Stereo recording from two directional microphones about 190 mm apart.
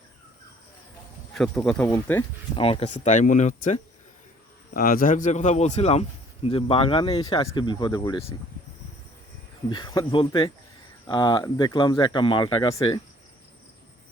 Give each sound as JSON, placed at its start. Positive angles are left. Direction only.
{"t": 1.3, "sound": "speech", "side_deg": 5}
{"t": 2.6, "sound": "a man's voice", "side_deg": 30}
{"t": 9.6, "sound": "speech", "side_deg": 25}